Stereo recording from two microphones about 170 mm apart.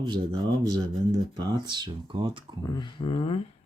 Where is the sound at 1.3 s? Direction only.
25° right (ahead or behind).